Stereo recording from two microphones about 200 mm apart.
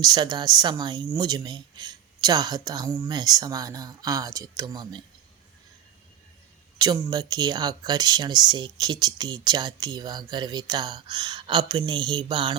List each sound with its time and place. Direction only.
0.0 s a woman's voice: 20° right (ahead or behind)
6.7 s a woman's voice: 20° right (ahead or behind)